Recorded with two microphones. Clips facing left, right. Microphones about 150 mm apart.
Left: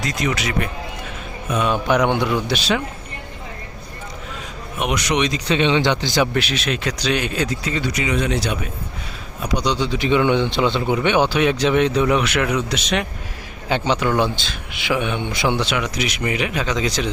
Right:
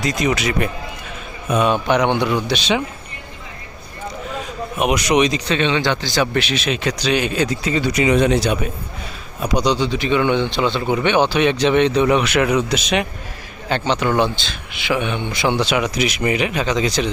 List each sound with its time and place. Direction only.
0.0 s speech: 15° right (ahead or behind)
1.9 s speech: 5° left (ahead or behind)
4.9 s speech: 10° right (ahead or behind)
5.5 s speech: 15° left (ahead or behind)
6.3 s speech: centre (ahead or behind)
8.0 s speech: 30° right (ahead or behind)
9.6 s speech: 5° right (ahead or behind)
10.0 s speech: 15° left (ahead or behind); by 13.1 s 5° right (ahead or behind)
13.7 s speech: 10° left (ahead or behind)
15.7 s speech: 10° right (ahead or behind)